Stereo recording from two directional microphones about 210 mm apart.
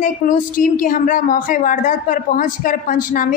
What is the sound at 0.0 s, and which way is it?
A woman's voice, 40° left (ahead or behind).